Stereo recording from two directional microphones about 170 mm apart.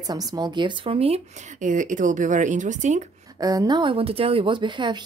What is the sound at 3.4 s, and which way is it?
A woman's voice, 20° right (ahead or behind).